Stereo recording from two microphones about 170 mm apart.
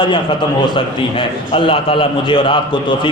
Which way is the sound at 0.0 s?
25° left (ahead or behind).